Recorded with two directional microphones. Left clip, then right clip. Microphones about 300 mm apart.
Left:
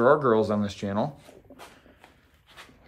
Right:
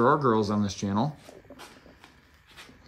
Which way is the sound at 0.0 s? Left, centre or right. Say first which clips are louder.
Left 2 dB; centre.